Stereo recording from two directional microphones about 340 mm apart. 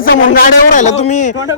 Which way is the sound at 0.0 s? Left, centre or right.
Left.